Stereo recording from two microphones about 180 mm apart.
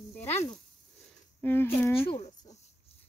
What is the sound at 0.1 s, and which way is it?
Snake, 15° left (ahead or behind).